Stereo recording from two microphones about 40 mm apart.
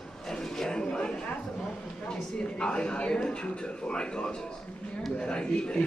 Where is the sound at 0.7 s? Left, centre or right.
Left.